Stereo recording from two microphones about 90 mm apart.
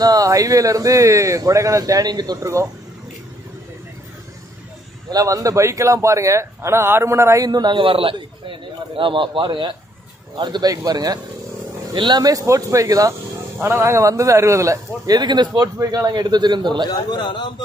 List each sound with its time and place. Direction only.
0.0 s a man's voice: 45° right (ahead or behind)
2.4 s a man's voice: 35° right (ahead or behind)
5.1 s a man's voice: 40° right (ahead or behind)
7.4 s speech: 50° right (ahead or behind)
7.8 s a man's voice: 80° right
10.3 s a man's voice: 50° right (ahead or behind)
17.1 s a man's voice: 60° left (ahead or behind)